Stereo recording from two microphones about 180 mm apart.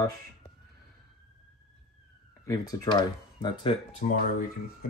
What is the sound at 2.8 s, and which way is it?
Speech, 25° left (ahead or behind).